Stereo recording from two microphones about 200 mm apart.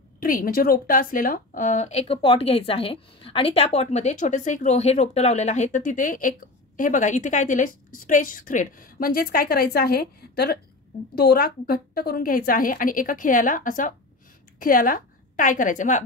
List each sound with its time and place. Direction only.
0.2 s a woman's voice: 45° left (ahead or behind)